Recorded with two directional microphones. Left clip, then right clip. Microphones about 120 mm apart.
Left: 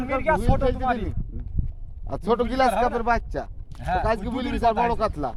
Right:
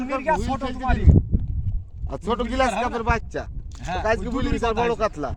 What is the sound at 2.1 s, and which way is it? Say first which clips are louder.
Speech: left 2 dB; 50° left (ahead or behind).